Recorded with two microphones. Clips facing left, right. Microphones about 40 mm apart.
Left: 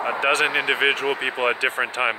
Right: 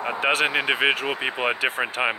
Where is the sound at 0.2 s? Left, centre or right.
Centre.